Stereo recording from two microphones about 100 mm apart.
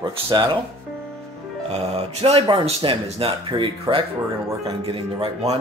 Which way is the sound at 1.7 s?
85° right.